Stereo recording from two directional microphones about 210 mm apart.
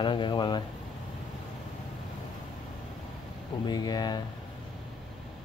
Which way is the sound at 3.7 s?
20° left (ahead or behind).